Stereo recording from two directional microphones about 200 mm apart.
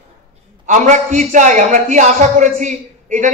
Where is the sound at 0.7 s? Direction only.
40° right (ahead or behind).